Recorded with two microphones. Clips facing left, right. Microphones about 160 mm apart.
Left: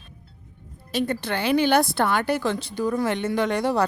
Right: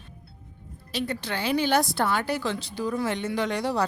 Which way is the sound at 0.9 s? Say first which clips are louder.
Left 5 dB; 50° left (ahead or behind).